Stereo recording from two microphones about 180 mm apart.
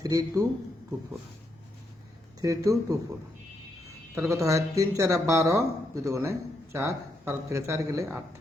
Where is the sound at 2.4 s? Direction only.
20° right (ahead or behind).